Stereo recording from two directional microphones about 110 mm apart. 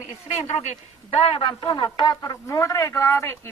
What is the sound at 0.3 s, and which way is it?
Speech, 90° left.